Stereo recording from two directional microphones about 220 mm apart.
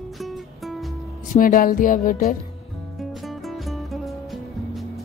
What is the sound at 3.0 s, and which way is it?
Music, centre (ahead or behind).